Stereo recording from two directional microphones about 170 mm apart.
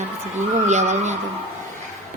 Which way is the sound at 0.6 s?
45° right (ahead or behind).